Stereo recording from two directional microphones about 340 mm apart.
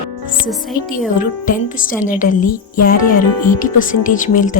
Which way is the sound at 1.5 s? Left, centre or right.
Left.